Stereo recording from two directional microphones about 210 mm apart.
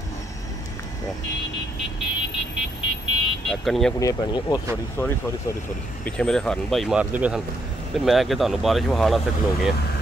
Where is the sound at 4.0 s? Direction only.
20° left (ahead or behind); by 9.2 s centre (ahead or behind).